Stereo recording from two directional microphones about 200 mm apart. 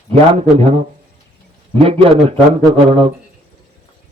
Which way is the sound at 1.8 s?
30° right (ahead or behind).